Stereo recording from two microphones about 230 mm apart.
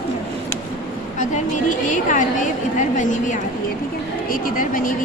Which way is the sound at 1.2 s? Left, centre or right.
Left.